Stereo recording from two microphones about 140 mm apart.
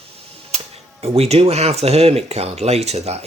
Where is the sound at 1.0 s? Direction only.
50° right (ahead or behind).